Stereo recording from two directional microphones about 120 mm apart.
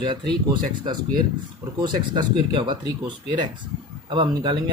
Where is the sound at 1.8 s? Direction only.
40° right (ahead or behind).